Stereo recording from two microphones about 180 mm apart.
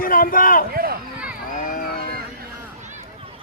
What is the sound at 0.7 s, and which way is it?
Run, 55° right (ahead or behind).